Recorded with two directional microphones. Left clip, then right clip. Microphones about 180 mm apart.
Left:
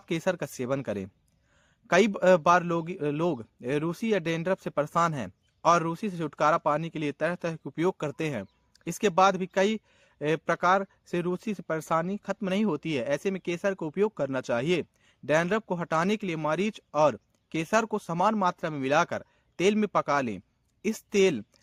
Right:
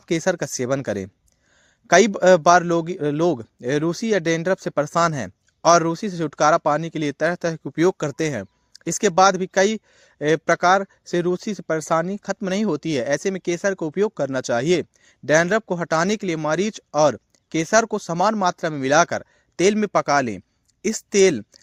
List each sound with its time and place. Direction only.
0.0 s a man's voice: 30° right (ahead or behind)